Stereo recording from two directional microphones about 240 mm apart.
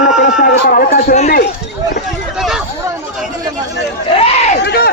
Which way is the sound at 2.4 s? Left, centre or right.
Centre.